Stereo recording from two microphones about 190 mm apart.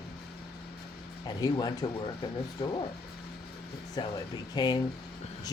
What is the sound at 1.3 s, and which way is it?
Speech, 20° left (ahead or behind).